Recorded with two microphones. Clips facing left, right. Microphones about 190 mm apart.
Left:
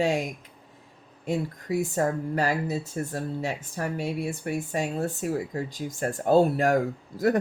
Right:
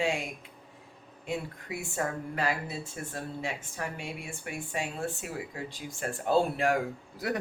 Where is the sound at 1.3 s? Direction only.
40° left (ahead or behind).